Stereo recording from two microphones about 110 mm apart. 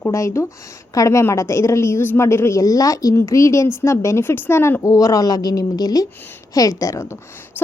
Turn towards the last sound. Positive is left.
turn(degrees=25)  # may be behind; listen again after turning